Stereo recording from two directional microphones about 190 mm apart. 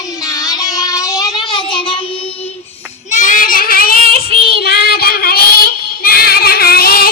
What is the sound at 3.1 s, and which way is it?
Child singing, 40° left (ahead or behind).